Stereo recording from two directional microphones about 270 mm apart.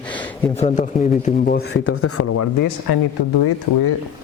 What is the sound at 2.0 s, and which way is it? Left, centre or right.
Speech, left.